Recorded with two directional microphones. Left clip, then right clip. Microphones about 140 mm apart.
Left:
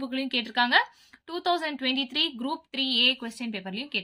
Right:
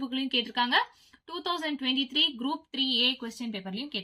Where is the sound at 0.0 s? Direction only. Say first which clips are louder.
Even; 35° left (ahead or behind).